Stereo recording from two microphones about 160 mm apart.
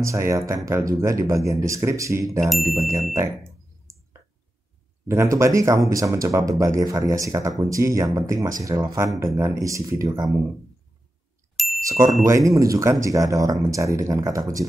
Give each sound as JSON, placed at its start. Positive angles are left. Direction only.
{"t": 0.0, "sound": "speech", "side_deg": -20}
{"t": 5.0, "sound": "speech", "side_deg": -20}
{"t": 11.5, "sound": "bicycle bell", "side_deg": 0}
{"t": 12.3, "sound": "speech", "side_deg": -20}